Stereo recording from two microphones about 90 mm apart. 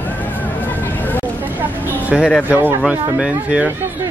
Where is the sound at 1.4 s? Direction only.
20° right (ahead or behind).